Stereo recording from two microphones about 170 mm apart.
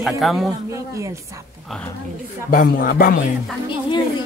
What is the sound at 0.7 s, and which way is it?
Speech, 15° right (ahead or behind).